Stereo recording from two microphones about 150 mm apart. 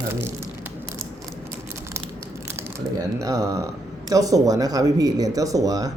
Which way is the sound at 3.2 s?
20° right (ahead or behind).